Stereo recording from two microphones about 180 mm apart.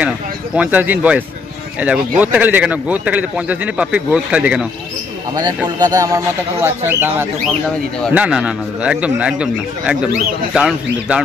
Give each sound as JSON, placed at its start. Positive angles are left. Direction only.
{"t": 0.6, "sound": "a man's voice", "side_deg": -10}
{"t": 5.8, "sound": "a man's voice", "side_deg": -20}